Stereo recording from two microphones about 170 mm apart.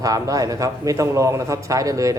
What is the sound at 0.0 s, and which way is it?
A man's voice, 20° right (ahead or behind).